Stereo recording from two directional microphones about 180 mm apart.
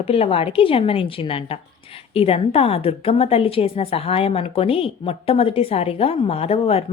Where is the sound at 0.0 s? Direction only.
30° left (ahead or behind).